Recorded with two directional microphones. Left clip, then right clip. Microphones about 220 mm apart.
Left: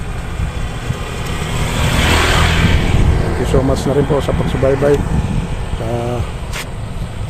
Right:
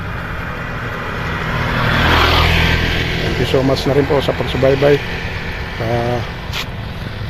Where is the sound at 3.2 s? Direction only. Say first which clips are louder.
Left 1 dB; 25° right (ahead or behind).